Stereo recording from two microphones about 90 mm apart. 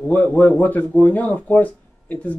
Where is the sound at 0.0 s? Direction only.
15° left (ahead or behind).